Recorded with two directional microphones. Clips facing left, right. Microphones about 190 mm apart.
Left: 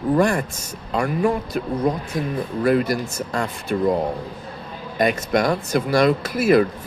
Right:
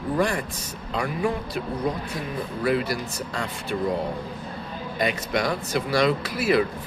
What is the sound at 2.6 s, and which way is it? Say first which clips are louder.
Speech: left 5 dB; 50° left (ahead or behind).